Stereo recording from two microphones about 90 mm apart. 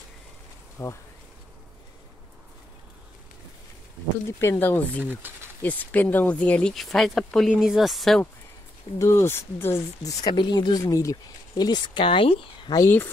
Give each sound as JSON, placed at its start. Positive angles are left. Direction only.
{"t": 0.8, "sound": "speech", "side_deg": 30}
{"t": 4.4, "sound": "speech", "side_deg": 25}
{"t": 5.0, "sound": "speech", "side_deg": -25}
{"t": 5.6, "sound": "speech", "side_deg": 20}
{"t": 6.7, "sound": "speech", "side_deg": 0}
{"t": 8.9, "sound": "speech", "side_deg": 30}
{"t": 10.3, "sound": "speech", "side_deg": 60}
{"t": 10.8, "sound": "speech", "side_deg": 35}